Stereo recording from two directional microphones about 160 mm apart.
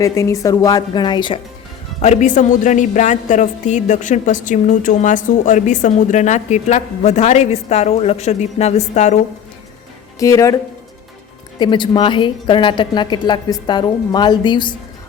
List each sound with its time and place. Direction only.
0.0 s a woman's voice: 20° left (ahead or behind)
2.0 s a woman's voice: 50° left (ahead or behind)
10.2 s a woman's voice: 20° left (ahead or behind)
11.6 s a woman's voice: 30° left (ahead or behind)